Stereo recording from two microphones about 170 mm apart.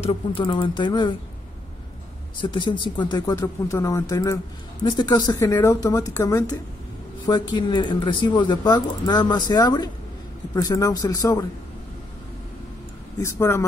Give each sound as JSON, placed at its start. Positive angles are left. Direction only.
{"t": 0.0, "sound": "speech", "side_deg": 35}
{"t": 2.4, "sound": "speech", "side_deg": 30}
{"t": 13.2, "sound": "speech", "side_deg": 15}